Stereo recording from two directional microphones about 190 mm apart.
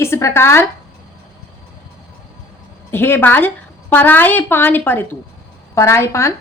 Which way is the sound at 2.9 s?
10° left (ahead or behind).